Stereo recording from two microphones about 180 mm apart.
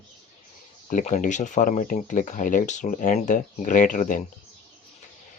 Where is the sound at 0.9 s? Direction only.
45° left (ahead or behind).